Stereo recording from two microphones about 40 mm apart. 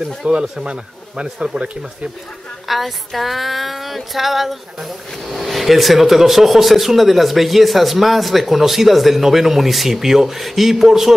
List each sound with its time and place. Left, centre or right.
0.2 s speech: right
0.7 s speech: right
2.7 s female singing: centre